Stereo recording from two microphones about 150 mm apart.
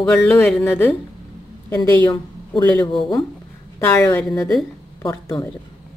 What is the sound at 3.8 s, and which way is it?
Speech, 15° left (ahead or behind).